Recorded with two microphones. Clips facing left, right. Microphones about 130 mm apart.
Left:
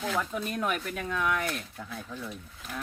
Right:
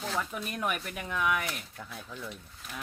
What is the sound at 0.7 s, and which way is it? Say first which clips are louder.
Speech: left 3 dB; 10° right (ahead or behind).